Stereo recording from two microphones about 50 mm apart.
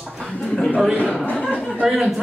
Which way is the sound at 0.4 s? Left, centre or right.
Centre.